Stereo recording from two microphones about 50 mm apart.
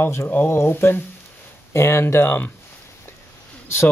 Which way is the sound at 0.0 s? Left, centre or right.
Left.